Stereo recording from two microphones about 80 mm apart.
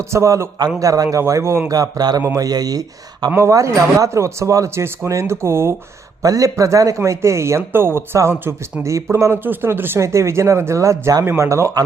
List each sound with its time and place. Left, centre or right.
0.1 s speech: right
1.7 s speech: right
3.5 s speech: right
6.2 s speech: right